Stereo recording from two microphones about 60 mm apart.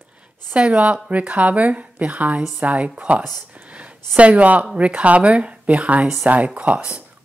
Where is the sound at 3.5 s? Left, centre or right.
Right.